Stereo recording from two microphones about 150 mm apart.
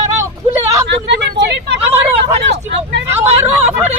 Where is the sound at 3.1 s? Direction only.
15° right (ahead or behind).